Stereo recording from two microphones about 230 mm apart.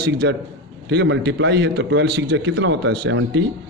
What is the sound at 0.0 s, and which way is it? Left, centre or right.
A man's voice, right.